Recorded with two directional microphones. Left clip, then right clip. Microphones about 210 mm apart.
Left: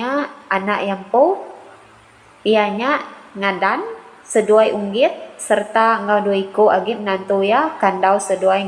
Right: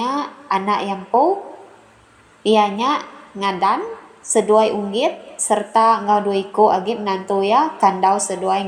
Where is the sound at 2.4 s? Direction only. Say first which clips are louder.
Even; 20° right (ahead or behind).